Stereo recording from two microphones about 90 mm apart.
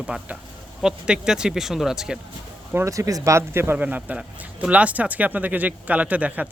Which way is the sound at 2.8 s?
40° right (ahead or behind).